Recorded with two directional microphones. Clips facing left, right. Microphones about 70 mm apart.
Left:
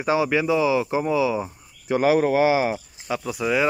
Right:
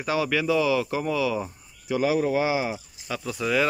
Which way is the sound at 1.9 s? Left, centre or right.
Left.